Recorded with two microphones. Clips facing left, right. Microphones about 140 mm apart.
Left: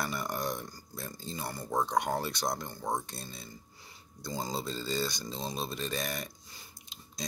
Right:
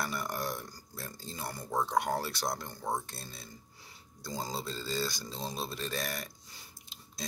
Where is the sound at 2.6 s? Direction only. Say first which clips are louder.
Left 1 dB; 15° left (ahead or behind).